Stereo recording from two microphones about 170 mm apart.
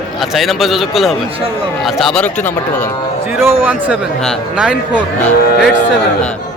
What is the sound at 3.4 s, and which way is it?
A man's voice, 15° right (ahead or behind).